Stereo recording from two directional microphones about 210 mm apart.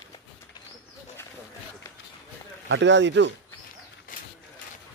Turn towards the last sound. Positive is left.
turn(degrees=-55)  # may be behind; listen again after turning